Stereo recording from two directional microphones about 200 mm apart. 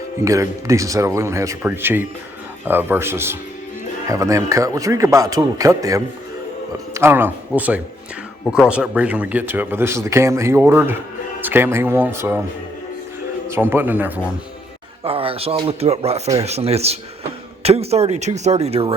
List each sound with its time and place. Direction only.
0.2 s speech: 15° right (ahead or behind)
13.5 s speech: 10° right (ahead or behind)
15.0 s speech: 30° right (ahead or behind)